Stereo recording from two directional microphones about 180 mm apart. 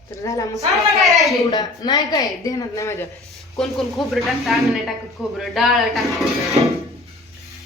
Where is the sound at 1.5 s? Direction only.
20° left (ahead or behind).